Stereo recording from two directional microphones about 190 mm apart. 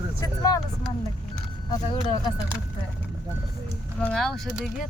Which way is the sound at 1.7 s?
25° left (ahead or behind).